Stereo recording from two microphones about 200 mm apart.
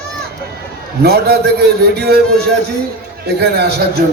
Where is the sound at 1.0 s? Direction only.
50° right (ahead or behind).